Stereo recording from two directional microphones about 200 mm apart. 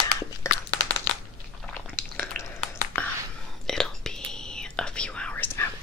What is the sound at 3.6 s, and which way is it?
Whispering, 5° left (ahead or behind).